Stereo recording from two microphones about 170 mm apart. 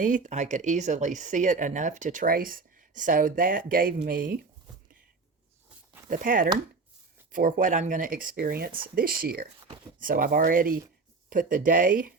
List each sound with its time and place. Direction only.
0.0 s speech: 50° right (ahead or behind)
6.1 s speech: 55° right (ahead or behind)